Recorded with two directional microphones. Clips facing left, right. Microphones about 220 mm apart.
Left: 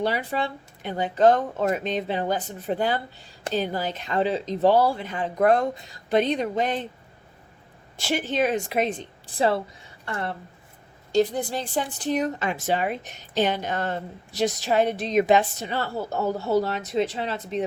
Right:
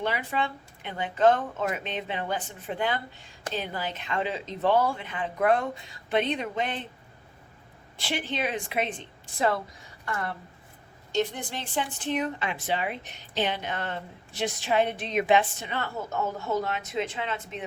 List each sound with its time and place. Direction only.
0.0 s a woman's voice: 35° left (ahead or behind)
7.9 s a woman's voice: 45° left (ahead or behind)